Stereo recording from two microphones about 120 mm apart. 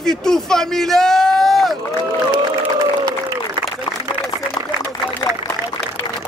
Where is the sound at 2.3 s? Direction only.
35° right (ahead or behind).